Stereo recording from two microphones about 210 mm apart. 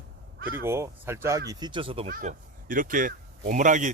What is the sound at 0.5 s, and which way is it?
Speech, 10° right (ahead or behind).